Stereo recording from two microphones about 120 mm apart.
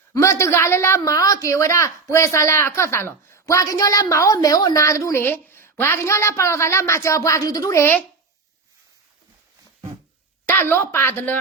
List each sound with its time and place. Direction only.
0.1 s a woman's voice: 25° left (ahead or behind)
10.4 s a woman's voice: 20° left (ahead or behind)